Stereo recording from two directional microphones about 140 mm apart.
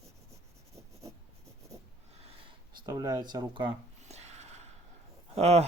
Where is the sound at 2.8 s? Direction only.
25° right (ahead or behind).